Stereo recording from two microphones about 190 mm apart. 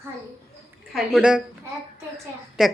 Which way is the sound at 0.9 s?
Centre (ahead or behind).